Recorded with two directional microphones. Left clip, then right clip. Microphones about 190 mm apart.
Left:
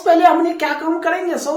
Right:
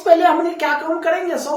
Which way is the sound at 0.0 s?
30° left (ahead or behind).